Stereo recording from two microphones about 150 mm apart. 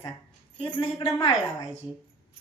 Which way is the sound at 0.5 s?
40° left (ahead or behind).